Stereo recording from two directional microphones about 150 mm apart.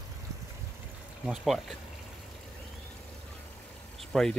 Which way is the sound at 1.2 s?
Centre (ahead or behind).